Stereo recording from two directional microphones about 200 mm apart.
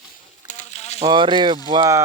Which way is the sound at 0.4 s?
35° left (ahead or behind).